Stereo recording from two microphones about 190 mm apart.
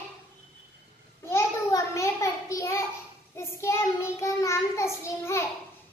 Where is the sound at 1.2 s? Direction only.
15° left (ahead or behind).